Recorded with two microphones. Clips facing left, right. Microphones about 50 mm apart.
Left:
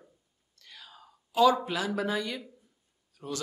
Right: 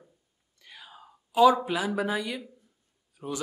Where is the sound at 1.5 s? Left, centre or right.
Centre.